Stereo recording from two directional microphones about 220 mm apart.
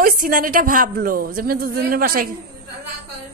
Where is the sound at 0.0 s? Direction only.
40° right (ahead or behind).